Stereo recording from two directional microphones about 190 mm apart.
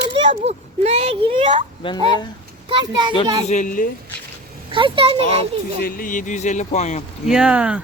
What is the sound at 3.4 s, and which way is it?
Speech, 40° left (ahead or behind).